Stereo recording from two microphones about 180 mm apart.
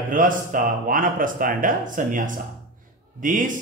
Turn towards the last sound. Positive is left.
turn(degrees=-45)  # may be behind; listen again after turning